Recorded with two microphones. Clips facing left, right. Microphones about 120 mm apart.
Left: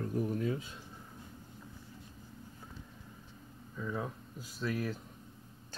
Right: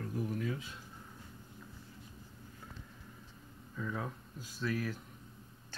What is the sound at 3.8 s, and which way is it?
Speech, 10° left (ahead or behind).